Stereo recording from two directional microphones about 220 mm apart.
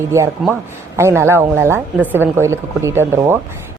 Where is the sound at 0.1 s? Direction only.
10° right (ahead or behind).